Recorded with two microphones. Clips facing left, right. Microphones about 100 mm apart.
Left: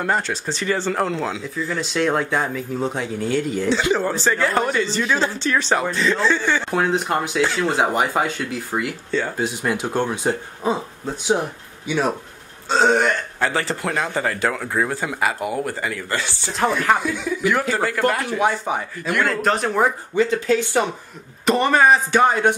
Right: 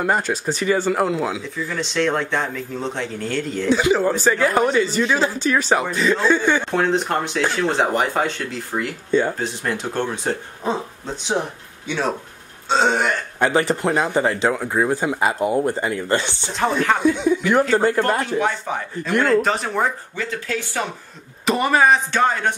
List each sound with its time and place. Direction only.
0.0 s speech: 15° right (ahead or behind)
1.7 s speech: 5° left (ahead or behind)
3.6 s speech: 10° right (ahead or behind)
6.7 s speech: 5° left (ahead or behind)
11.9 s speech: 10° left (ahead or behind)
12.6 s speech: centre (ahead or behind)
13.4 s a man's voice: 20° right (ahead or behind)
16.5 s speech: 5° left (ahead or behind)
17.0 s a man's voice: 20° right (ahead or behind)
18.4 s speech: 15° left (ahead or behind)
19.2 s speech: centre (ahead or behind)
20.2 s speech: 20° left (ahead or behind)
21.5 s speech: 5° right (ahead or behind)
22.1 s speech: 15° left (ahead or behind)